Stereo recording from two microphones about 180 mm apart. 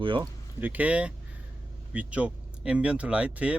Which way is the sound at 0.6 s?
10° right (ahead or behind).